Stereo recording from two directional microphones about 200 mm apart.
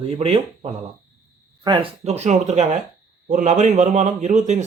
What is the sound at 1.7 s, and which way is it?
A man's voice, 30° right (ahead or behind).